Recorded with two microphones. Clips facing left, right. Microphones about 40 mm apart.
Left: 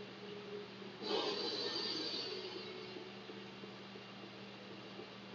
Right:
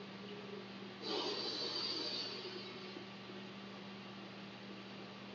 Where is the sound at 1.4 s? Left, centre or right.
Left.